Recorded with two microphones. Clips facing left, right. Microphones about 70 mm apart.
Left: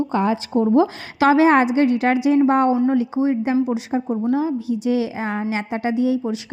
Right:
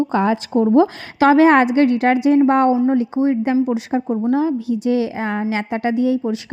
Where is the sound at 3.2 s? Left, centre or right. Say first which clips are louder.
Right 3 dB; right.